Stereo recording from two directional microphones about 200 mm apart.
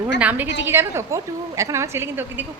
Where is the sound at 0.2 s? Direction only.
10° right (ahead or behind).